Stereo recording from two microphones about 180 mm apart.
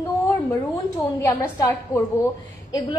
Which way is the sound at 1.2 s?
15° left (ahead or behind).